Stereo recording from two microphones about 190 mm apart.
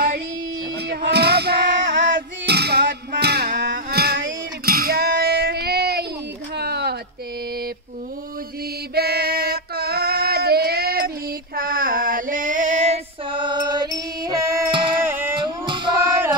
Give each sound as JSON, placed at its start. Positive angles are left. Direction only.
{"t": 0.8, "sound": "music", "side_deg": -60}
{"t": 3.7, "sound": "child singing", "side_deg": -55}
{"t": 6.5, "sound": "a sound", "side_deg": -60}
{"t": 8.9, "sound": "female singing", "side_deg": -55}
{"t": 15.0, "sound": "music", "side_deg": -10}
{"t": 15.3, "sound": "music", "side_deg": -25}